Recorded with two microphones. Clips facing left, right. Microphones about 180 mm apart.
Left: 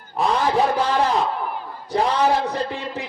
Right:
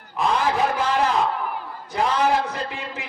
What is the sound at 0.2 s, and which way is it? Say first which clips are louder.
A man's voice: left 2 dB; 35° left (ahead or behind).